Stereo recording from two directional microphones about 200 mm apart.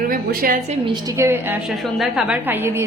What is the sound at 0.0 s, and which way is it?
Speech, 45° right (ahead or behind).